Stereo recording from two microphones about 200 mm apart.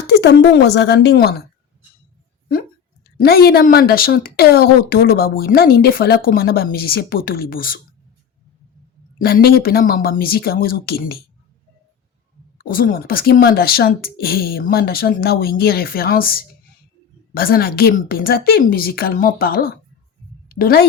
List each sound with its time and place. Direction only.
0.1 s a woman's voice: 55° left (ahead or behind)
2.5 s speech: 45° left (ahead or behind)
9.1 s speech: 50° left (ahead or behind)
12.5 s a woman's voice: 45° left (ahead or behind)